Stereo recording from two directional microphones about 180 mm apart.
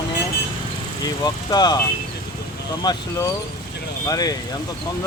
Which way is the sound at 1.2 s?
20° left (ahead or behind).